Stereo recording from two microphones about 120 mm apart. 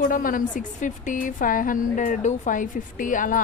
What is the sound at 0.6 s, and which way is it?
A woman's voice, 90° left.